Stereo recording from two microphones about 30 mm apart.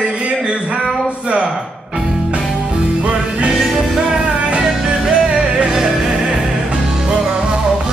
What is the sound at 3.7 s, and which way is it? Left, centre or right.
Music, centre.